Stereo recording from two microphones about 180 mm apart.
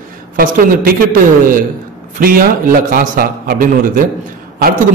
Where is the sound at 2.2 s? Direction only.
50° right (ahead or behind).